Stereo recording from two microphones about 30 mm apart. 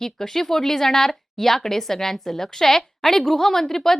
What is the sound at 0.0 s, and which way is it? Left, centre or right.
A woman's voice, centre.